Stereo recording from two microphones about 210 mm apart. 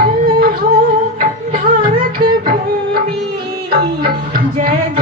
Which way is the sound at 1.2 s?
40° right (ahead or behind).